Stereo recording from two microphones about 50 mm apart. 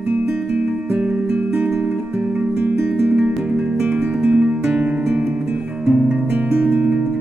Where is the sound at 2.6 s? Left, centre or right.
Right.